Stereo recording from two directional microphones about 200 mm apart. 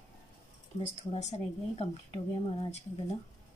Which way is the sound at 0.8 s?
30° left (ahead or behind).